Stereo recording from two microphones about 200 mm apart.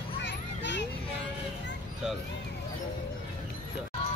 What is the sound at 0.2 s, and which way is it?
Children playing, 60° left (ahead or behind).